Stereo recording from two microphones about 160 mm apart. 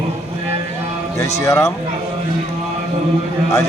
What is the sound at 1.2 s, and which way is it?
Speech, 20° left (ahead or behind).